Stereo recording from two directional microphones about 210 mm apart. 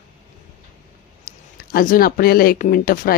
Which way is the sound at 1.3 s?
40° left (ahead or behind).